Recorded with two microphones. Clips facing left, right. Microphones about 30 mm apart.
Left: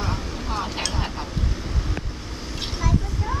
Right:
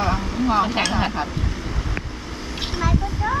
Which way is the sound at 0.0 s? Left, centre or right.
Right.